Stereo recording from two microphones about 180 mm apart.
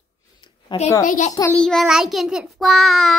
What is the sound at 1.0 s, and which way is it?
Speech, 45° left (ahead or behind).